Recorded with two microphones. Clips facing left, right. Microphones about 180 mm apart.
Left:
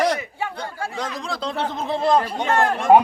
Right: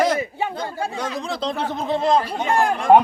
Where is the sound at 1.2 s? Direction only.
Centre (ahead or behind).